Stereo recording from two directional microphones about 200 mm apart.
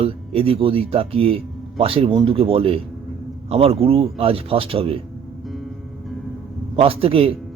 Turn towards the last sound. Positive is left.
turn(degrees=-30)  # may be behind; listen again after turning